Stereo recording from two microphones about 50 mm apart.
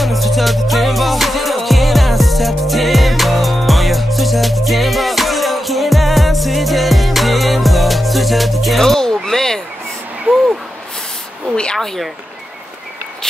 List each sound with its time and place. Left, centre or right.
0.0 s music: centre
11.5 s a sound: centre
11.8 s speech: centre